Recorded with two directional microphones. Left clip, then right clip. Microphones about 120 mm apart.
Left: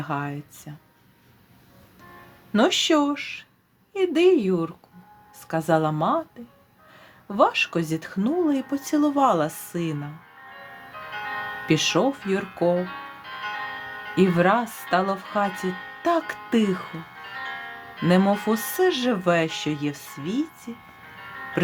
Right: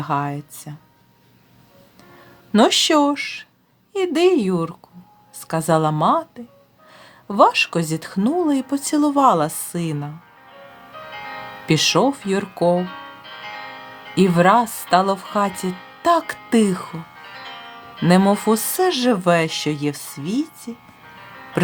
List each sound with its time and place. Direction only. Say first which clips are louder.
0.0 s speech: right 7 dB; 40° right (ahead or behind)
2.5 s speech: right 5 dB; 55° right (ahead or behind)
10.9 s music: left 1 dB; 30° right (ahead or behind)
11.6 s speech: right 5 dB; 50° right (ahead or behind)
12.7 s music: right 4 dB; 30° right (ahead or behind)
14.2 s speech: right 5 dB; 45° right (ahead or behind)
15.7 s music: left 1 dB; 25° right (ahead or behind)
16.0 s speech: right 6 dB; 45° right (ahead or behind)
16.9 s music: even; 30° right (ahead or behind)
18.1 s speech: right 5 dB; 45° right (ahead or behind)
21.2 s music: left 4 dB; 30° right (ahead or behind)